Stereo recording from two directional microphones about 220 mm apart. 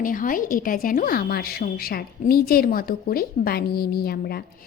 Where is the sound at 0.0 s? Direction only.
40° left (ahead or behind).